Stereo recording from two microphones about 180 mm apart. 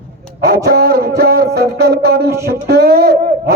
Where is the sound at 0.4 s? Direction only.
60° right (ahead or behind).